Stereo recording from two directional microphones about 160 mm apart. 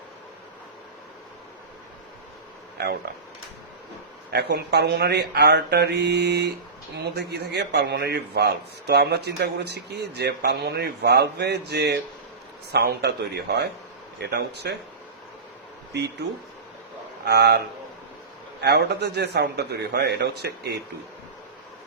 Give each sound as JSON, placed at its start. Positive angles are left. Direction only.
{"t": 4.3, "sound": "a man's voice", "side_deg": -90}
{"t": 17.2, "sound": "a man's voice", "side_deg": -90}
{"t": 18.6, "sound": "a man's voice", "side_deg": -90}